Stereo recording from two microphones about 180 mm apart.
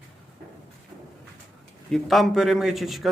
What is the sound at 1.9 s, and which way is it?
A man's voice, centre (ahead or behind).